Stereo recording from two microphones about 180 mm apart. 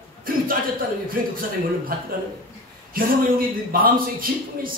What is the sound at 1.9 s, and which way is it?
A man's voice, 55° right (ahead or behind).